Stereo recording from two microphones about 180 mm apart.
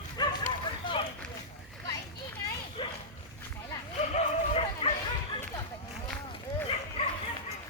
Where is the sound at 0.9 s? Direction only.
25° left (ahead or behind).